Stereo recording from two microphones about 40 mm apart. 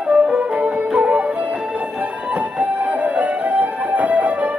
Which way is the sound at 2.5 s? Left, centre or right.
Right.